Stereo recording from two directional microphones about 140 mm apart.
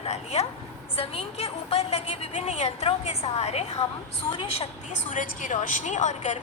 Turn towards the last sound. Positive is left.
turn(degrees=60)  # may be behind; listen again after turning